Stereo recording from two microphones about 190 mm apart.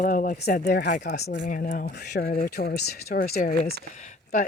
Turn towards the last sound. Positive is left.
turn(degrees=40)  # may be behind; listen again after turning